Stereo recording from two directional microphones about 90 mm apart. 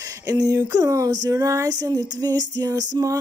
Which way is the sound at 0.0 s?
40° right (ahead or behind).